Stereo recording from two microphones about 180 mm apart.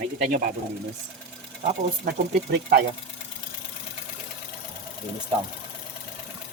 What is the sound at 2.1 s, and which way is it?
Speech, 65° right (ahead or behind).